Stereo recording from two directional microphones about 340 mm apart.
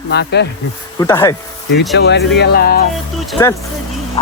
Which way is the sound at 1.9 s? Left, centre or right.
Left.